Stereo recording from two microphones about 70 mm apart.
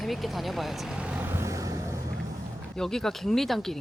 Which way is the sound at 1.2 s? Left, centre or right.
Right.